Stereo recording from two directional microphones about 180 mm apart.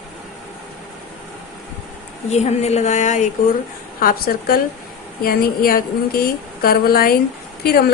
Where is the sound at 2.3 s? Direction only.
40° left (ahead or behind).